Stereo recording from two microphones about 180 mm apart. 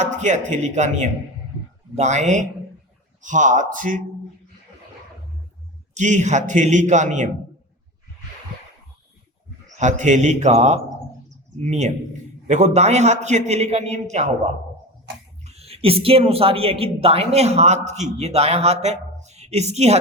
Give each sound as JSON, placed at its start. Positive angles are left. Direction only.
{"t": 0.0, "sound": "speech", "side_deg": -40}
{"t": 5.9, "sound": "speech", "side_deg": -40}
{"t": 9.7, "sound": "speech", "side_deg": -40}
{"t": 15.4, "sound": "speech", "side_deg": -35}